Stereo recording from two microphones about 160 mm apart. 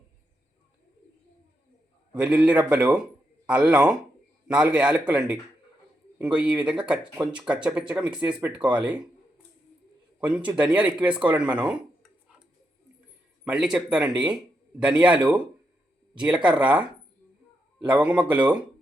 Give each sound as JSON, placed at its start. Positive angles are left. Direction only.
{"t": 2.1, "sound": "speech", "side_deg": -5}
{"t": 7.0, "sound": "speech", "side_deg": -30}
{"t": 7.3, "sound": "speech", "side_deg": -5}
{"t": 10.2, "sound": "speech", "side_deg": -5}
{"t": 13.4, "sound": "speech", "side_deg": -5}